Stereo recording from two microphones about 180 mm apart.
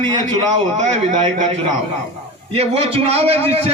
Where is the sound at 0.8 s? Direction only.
40° right (ahead or behind).